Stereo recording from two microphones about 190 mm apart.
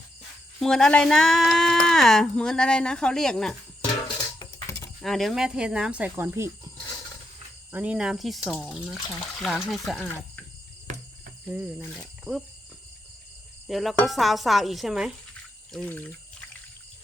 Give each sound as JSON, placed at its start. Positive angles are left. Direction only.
{"t": 0.6, "sound": "speech", "side_deg": 0}
{"t": 4.2, "sound": "a sound", "side_deg": 20}
{"t": 5.0, "sound": "speech", "side_deg": 0}
{"t": 7.7, "sound": "speech", "side_deg": -5}
{"t": 11.4, "sound": "cricket", "side_deg": -10}
{"t": 11.9, "sound": "speech", "side_deg": 0}
{"t": 13.7, "sound": "speech", "side_deg": 0}